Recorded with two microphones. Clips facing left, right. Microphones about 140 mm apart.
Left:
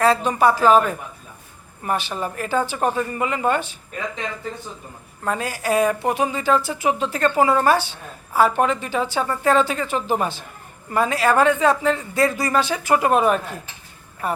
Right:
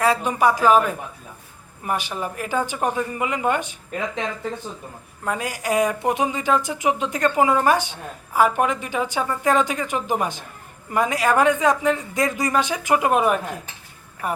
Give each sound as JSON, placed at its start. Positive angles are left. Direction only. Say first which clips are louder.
{"t": 0.0, "sound": "a woman's voice", "louder": "left 2 dB", "side_deg": -10}
{"t": 5.2, "sound": "a woman's voice", "louder": "left 2 dB", "side_deg": -15}